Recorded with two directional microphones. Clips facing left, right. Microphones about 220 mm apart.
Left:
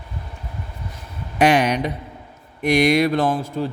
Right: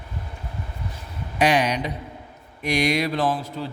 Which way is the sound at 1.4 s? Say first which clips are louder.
Left 4 dB; 55° left (ahead or behind).